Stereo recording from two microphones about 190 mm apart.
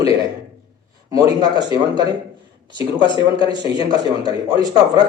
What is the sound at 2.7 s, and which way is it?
Speech, 25° left (ahead or behind).